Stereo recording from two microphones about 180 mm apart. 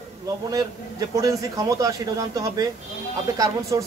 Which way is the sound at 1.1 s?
20° right (ahead or behind).